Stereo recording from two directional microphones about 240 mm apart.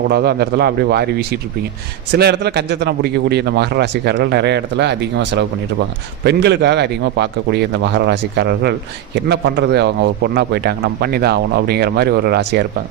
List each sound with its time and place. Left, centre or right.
0.1 s a man's voice: right